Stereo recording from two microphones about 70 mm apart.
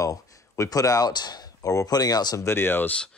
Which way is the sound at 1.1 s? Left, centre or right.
Left.